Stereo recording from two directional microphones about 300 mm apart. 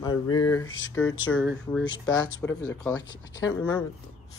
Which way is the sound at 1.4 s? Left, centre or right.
Centre.